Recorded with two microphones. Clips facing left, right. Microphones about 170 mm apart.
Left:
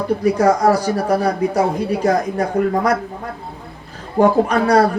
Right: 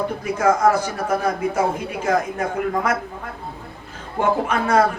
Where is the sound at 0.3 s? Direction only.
35° left (ahead or behind).